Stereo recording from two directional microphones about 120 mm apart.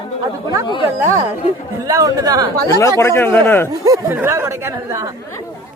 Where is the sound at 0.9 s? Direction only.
20° right (ahead or behind).